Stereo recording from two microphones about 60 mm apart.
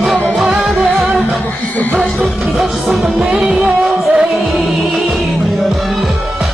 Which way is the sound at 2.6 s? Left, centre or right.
Centre.